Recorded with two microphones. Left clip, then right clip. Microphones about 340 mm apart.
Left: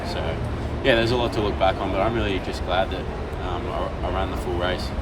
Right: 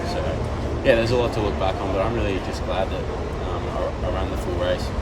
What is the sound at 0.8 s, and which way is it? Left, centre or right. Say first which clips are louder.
Speech: right 1 dB; centre.